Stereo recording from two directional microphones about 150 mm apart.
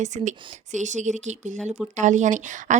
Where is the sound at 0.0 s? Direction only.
55° right (ahead or behind).